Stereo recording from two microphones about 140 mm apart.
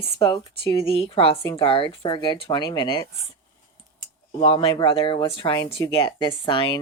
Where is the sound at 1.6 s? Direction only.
40° left (ahead or behind).